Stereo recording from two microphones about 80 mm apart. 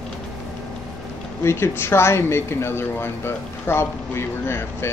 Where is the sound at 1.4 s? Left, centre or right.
Left.